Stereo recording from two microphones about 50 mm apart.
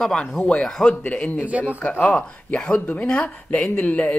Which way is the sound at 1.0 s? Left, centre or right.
Left.